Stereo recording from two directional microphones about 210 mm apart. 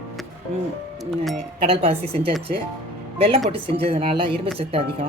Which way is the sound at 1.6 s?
25° right (ahead or behind).